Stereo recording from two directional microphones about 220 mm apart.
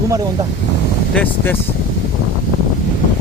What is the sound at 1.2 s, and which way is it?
Speech, 10° left (ahead or behind).